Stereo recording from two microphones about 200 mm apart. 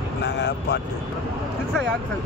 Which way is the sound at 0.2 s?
60° left (ahead or behind).